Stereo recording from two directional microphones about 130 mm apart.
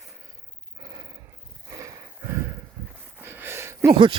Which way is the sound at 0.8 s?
30° right (ahead or behind).